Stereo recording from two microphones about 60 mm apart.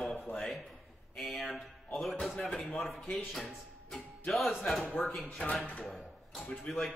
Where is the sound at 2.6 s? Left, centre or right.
Centre.